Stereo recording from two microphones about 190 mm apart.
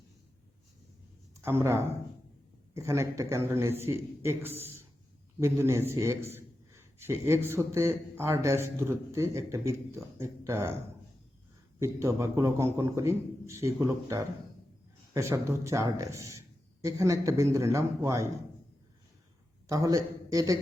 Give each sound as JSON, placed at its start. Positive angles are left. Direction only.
{"t": 1.4, "sound": "a man's voice", "side_deg": -15}
{"t": 11.8, "sound": "a man's voice", "side_deg": -15}
{"t": 19.6, "sound": "a man's voice", "side_deg": -20}